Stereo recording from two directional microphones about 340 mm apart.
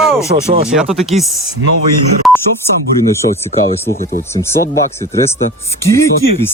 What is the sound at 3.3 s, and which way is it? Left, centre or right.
Speech, centre.